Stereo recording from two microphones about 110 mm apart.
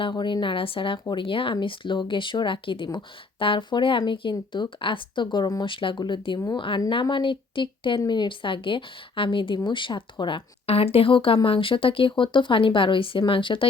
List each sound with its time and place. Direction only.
0.0 s speech: 45° left (ahead or behind)
5.7 s speech: 50° left (ahead or behind)